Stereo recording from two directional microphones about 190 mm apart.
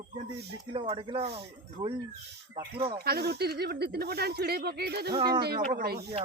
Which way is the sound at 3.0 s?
55° right (ahead or behind).